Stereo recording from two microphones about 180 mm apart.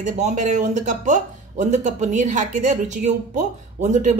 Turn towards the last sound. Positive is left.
turn(degrees=-40)  # may be behind; listen again after turning